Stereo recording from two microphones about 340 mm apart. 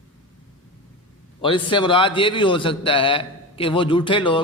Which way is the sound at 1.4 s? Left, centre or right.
Centre.